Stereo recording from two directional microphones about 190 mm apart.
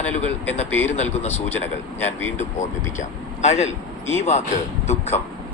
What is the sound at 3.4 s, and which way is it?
Speech, 35° left (ahead or behind).